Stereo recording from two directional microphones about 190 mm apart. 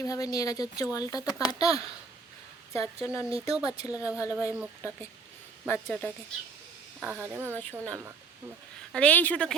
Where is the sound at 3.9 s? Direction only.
5° right (ahead or behind).